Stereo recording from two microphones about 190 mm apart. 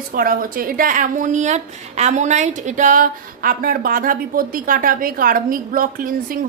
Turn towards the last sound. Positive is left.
turn(degrees=-45)  # may be behind; listen again after turning